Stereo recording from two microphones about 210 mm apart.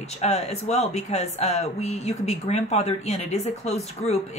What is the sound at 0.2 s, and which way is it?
Speech, 30° left (ahead or behind).